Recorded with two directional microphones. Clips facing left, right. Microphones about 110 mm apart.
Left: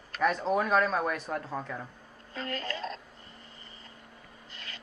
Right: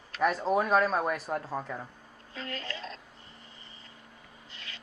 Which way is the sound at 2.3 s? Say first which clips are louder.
Left 3 dB; 45° left (ahead or behind).